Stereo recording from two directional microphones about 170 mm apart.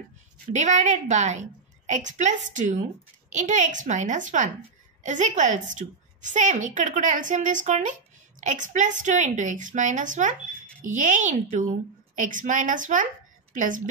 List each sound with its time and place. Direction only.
0.5 s a woman's voice: 45° right (ahead or behind)